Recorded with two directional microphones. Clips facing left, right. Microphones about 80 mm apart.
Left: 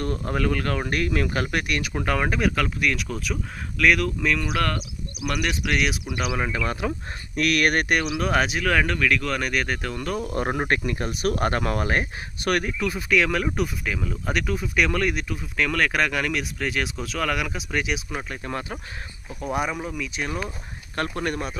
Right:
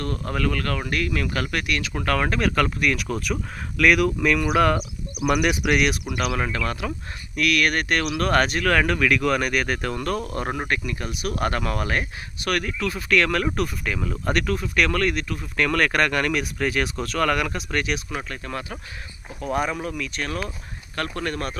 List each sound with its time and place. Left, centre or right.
0.0 s speech: left; by 5.8 s centre
6.1 s speech: centre
8.2 s speech: centre
10.3 s speech: left
10.7 s speech: left; by 18.3 s centre
18.3 s speech: left
19.4 s speech: centre
20.9 s speech: left